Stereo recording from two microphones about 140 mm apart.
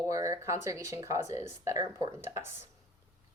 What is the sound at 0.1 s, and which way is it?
Speech, 25° right (ahead or behind).